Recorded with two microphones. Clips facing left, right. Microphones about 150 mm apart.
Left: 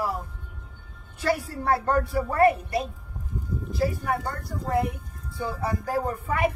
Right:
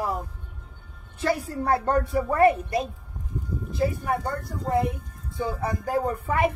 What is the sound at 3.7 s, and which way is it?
Speech, 25° right (ahead or behind).